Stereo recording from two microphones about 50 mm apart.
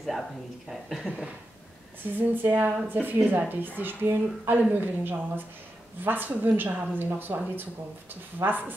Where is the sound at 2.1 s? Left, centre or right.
Right.